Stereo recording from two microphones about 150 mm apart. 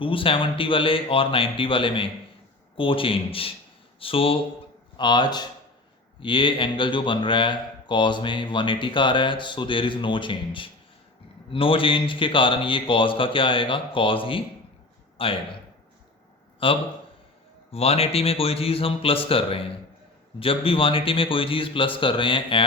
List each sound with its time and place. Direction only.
0.0 s speech: 35° left (ahead or behind)
16.6 s speech: 35° left (ahead or behind)